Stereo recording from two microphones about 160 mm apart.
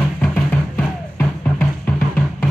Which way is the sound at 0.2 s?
15° left (ahead or behind).